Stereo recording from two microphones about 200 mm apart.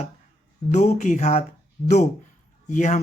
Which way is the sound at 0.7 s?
35° left (ahead or behind).